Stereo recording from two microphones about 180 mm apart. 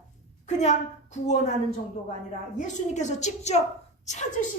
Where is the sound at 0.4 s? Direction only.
40° left (ahead or behind).